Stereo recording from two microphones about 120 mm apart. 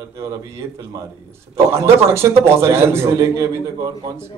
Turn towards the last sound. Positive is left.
turn(degrees=-25)  # may be behind; listen again after turning